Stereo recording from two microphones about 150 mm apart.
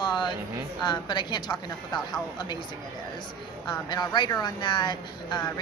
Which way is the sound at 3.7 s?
25° left (ahead or behind).